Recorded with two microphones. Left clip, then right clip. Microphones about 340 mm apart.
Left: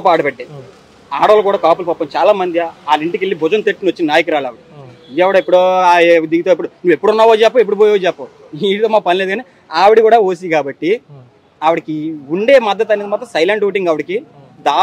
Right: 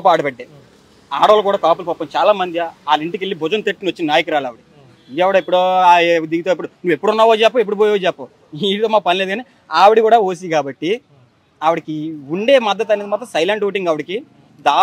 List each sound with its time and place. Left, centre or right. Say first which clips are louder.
0.0 s a man's voice: left 2 dB; right